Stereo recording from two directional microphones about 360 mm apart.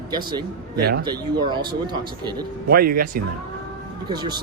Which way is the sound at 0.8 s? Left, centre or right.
Right.